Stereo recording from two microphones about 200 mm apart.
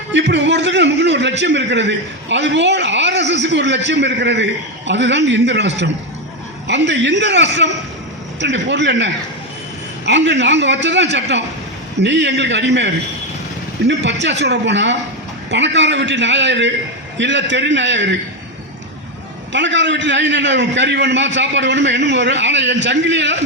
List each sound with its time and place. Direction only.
0.1 s a man's voice: 60° right (ahead or behind)
19.5 s a man's voice: 65° right (ahead or behind)